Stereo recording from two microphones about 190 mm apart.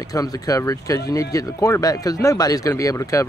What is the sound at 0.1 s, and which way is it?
Speech, 20° left (ahead or behind).